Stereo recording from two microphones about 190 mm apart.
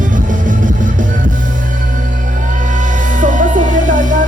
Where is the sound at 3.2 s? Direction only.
40° right (ahead or behind).